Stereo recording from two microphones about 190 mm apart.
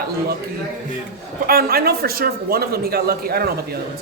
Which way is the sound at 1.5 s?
55° right (ahead or behind).